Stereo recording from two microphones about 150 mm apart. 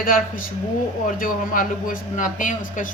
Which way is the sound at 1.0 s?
65° left (ahead or behind).